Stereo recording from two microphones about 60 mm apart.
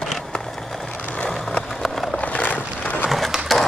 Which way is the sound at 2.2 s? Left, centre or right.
Left.